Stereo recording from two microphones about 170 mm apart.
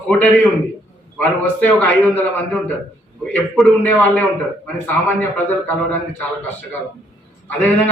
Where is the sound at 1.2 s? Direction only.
10° left (ahead or behind).